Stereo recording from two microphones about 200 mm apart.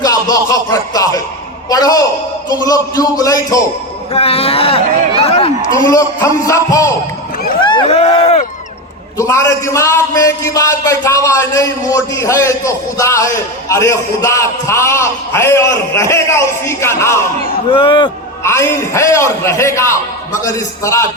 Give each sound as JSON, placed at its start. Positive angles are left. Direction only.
{"t": 0.0, "sound": "a sound", "side_deg": 20}
{"t": 2.5, "sound": "a man's voice", "side_deg": 20}
{"t": 4.1, "sound": "speech", "side_deg": 30}
{"t": 5.2, "sound": "a sound", "side_deg": 30}
{"t": 5.8, "sound": "a man's voice", "side_deg": 15}
{"t": 7.6, "sound": "run", "side_deg": 25}
{"t": 9.1, "sound": "a man's voice", "side_deg": 15}
{"t": 17.7, "sound": "speech", "side_deg": 25}
{"t": 18.4, "sound": "a man's voice", "side_deg": 15}